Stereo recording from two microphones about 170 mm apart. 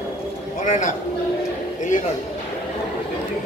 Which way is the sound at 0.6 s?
50° left (ahead or behind).